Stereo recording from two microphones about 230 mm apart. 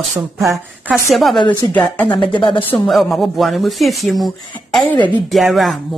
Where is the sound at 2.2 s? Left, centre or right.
Left.